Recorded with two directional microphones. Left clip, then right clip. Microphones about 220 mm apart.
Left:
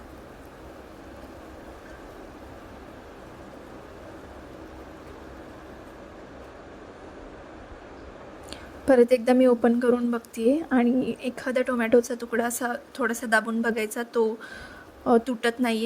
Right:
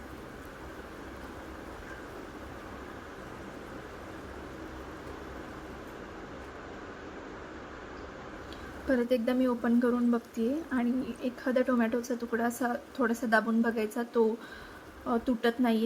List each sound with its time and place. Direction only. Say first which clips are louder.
8.9 s a woman's voice: left 10 dB; 35° left (ahead or behind)